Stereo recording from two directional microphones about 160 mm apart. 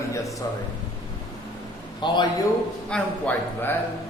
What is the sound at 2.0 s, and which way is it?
Speech, 25° left (ahead or behind).